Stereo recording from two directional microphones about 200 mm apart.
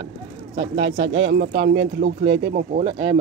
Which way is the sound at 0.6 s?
60° right (ahead or behind).